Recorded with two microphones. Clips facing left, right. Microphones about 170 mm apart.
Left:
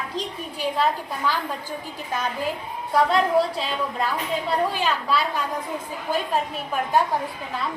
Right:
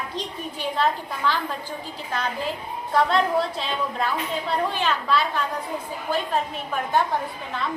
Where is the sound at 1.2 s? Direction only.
10° left (ahead or behind).